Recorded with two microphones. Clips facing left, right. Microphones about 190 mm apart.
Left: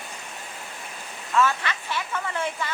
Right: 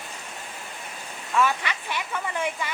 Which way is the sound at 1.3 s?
15° right (ahead or behind).